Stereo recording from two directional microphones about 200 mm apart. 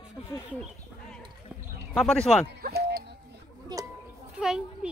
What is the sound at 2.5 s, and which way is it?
Music, 50° right (ahead or behind).